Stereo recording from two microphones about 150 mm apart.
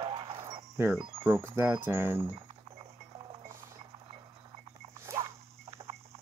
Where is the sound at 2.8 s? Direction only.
30° right (ahead or behind).